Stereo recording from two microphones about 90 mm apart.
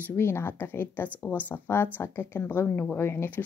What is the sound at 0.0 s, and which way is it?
A woman's voice, 25° left (ahead or behind).